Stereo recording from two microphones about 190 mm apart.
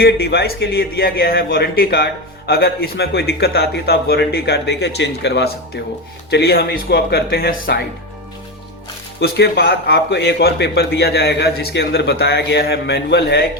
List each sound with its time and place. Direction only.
0.0 s a man's voice: 55° left (ahead or behind)
9.2 s a man's voice: 55° left (ahead or behind)